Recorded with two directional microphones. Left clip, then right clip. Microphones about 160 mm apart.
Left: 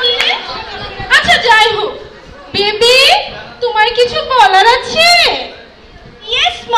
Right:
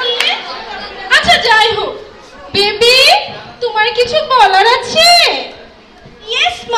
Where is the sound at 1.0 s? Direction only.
45° right (ahead or behind).